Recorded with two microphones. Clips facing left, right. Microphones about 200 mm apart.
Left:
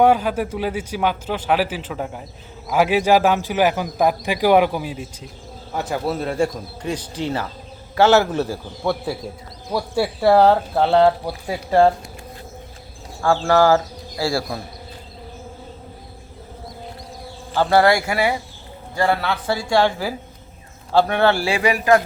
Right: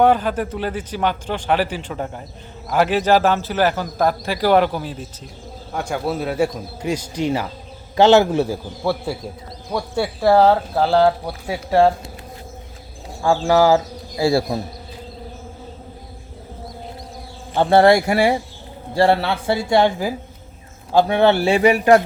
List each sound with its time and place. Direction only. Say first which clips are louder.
0.0 s a man's voice: even; 10° left (ahead or behind)
13.2 s a man's voice: right 1 dB; 15° right (ahead or behind)
17.5 s a man's voice: right 3 dB; 20° right (ahead or behind)